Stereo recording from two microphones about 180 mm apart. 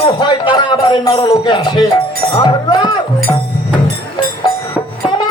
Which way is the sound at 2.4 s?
25° left (ahead or behind).